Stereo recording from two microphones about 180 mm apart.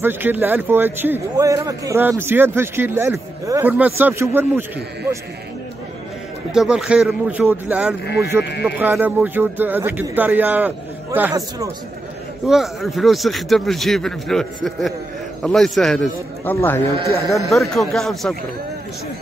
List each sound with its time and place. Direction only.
0.0 s a man's voice: 10° right (ahead or behind)
6.5 s a man's voice: 5° right (ahead or behind)
12.4 s a man's voice: centre (ahead or behind)
16.5 s speech: 15° left (ahead or behind)
17.5 s a man's voice: centre (ahead or behind)